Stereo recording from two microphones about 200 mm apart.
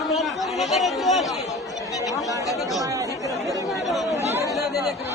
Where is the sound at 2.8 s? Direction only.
15° right (ahead or behind).